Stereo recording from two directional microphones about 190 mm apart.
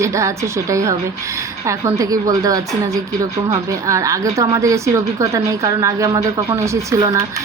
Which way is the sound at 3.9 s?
15° right (ahead or behind).